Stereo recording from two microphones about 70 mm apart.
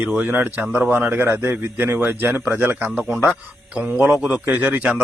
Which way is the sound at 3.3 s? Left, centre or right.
Centre.